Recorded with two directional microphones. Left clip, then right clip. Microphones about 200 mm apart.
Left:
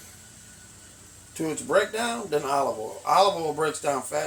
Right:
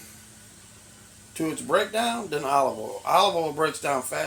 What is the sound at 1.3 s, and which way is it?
Speech, 30° right (ahead or behind).